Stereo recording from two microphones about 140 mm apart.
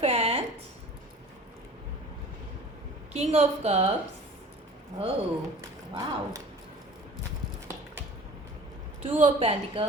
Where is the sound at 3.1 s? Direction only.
50° right (ahead or behind).